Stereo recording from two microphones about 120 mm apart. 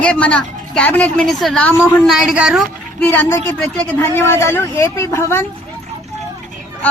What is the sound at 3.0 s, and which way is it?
A woman's voice, 15° left (ahead or behind).